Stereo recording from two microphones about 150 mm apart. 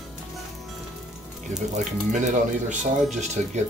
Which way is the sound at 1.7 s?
55° right (ahead or behind).